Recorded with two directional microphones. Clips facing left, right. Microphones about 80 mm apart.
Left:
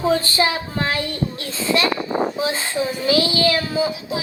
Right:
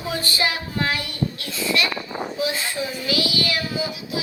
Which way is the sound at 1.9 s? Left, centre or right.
Left.